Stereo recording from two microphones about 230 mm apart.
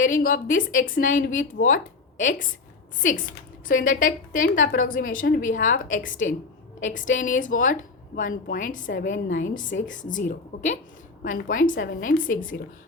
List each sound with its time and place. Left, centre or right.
0.0 s speech: left